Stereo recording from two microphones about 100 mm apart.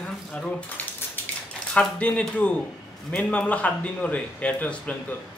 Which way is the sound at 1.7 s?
10° left (ahead or behind).